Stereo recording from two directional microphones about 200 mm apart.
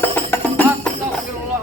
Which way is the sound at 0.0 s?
10° left (ahead or behind).